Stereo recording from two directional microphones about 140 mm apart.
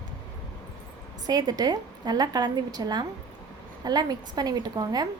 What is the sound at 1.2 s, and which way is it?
A woman's voice, 30° right (ahead or behind).